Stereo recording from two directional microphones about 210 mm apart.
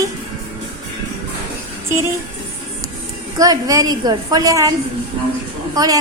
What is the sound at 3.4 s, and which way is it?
A woman's voice, 15° right (ahead or behind).